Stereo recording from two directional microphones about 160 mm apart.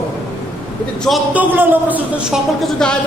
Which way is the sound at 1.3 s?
10° right (ahead or behind).